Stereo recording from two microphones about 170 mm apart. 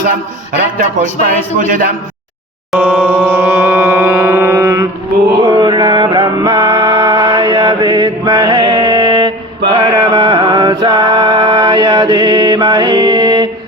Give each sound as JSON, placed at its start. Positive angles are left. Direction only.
{"t": 1.2, "sound": "speech", "side_deg": -55}
{"t": 2.7, "sound": "music", "side_deg": -5}
{"t": 4.2, "sound": "mantra", "side_deg": -15}
{"t": 11.3, "sound": "mantra", "side_deg": -20}